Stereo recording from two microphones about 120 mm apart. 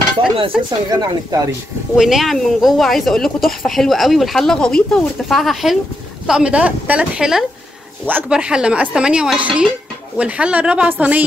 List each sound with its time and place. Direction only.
0.7 s speech: 35° right (ahead or behind)
2.0 s speech: 5° right (ahead or behind)